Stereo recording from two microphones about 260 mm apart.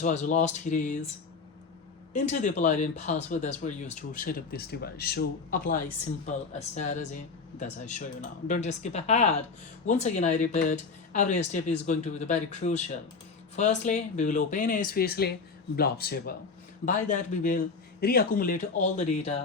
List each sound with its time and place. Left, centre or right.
0.0 s speech: left
2.1 s speech: left